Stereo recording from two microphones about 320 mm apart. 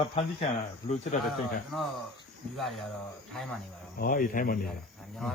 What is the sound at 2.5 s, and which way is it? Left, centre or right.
Speech, centre.